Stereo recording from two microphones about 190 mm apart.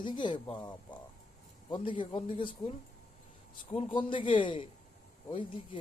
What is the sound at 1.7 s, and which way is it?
Speech, 25° left (ahead or behind).